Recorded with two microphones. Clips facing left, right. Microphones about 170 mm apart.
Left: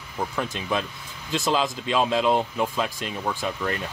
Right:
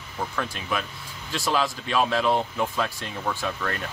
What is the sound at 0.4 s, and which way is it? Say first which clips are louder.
Speech: left 3 dB; 25° left (ahead or behind).